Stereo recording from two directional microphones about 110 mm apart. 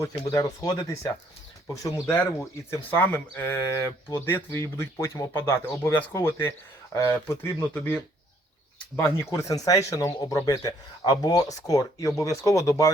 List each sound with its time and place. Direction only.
0.0 s speech: 30° left (ahead or behind)